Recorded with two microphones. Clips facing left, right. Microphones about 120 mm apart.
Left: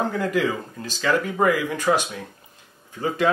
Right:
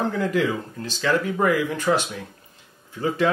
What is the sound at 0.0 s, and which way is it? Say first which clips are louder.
Speech: even; 10° left (ahead or behind).